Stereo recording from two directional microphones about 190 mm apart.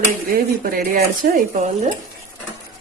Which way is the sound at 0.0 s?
50° right (ahead or behind).